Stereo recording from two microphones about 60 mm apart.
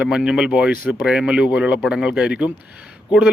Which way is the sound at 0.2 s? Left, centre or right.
Centre.